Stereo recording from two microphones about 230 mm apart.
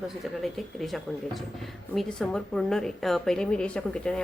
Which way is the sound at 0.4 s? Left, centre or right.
Centre.